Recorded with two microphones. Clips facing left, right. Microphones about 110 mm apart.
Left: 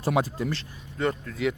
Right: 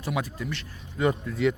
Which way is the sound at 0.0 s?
35° left (ahead or behind).